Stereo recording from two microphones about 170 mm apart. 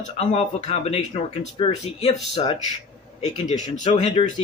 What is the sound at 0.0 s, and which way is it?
Speech, 40° left (ahead or behind).